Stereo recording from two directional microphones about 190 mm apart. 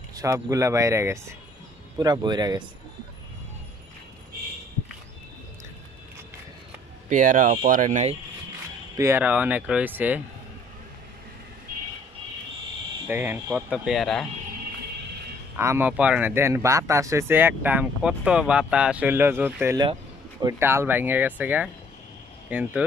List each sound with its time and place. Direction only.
0.1 s speech: 15° right (ahead or behind)
7.1 s speech: 45° right (ahead or behind)
8.9 s speech: 15° right (ahead or behind)
13.1 s speech: 10° right (ahead or behind)
15.5 s speech: 15° right (ahead or behind)